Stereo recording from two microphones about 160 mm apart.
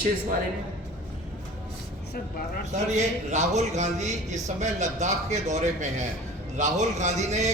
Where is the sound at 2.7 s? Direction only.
45° right (ahead or behind).